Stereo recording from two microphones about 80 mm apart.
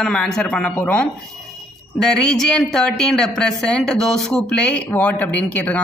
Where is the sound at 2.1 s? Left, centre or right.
Centre.